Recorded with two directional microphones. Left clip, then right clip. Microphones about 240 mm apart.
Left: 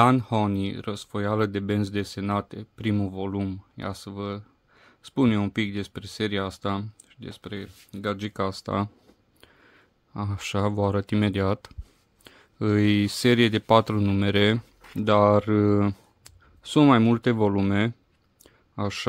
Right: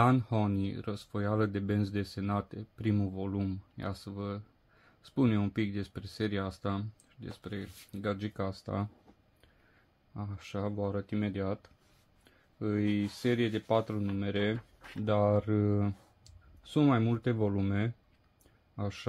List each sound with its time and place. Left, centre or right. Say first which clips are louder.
0.0 s speech: left 8 dB; left
10.1 s speech: left 11 dB; left
18.4 s a sound: left 9 dB; left